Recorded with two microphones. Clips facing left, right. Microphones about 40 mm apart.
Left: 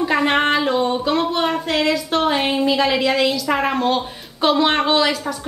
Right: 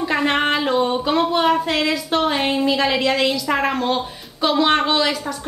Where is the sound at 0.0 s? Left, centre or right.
Centre.